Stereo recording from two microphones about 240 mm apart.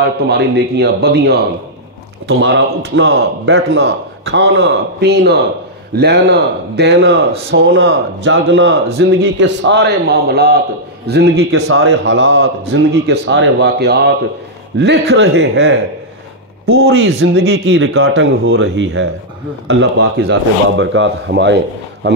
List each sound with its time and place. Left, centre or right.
0.0 s a man's voice: right
11.6 s a man's voice: right